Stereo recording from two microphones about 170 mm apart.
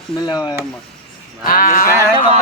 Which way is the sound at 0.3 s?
25° left (ahead or behind).